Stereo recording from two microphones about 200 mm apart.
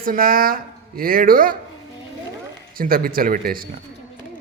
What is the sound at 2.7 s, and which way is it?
Speech, 45° right (ahead or behind).